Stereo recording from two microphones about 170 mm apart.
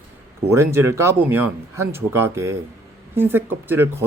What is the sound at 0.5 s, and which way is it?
Speech, 15° right (ahead or behind).